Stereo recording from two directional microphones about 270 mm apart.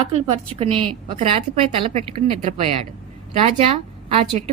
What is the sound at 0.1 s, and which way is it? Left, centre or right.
A woman's voice, right.